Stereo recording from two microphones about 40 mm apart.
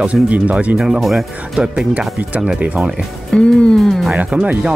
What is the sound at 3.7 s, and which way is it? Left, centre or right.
Speech, centre.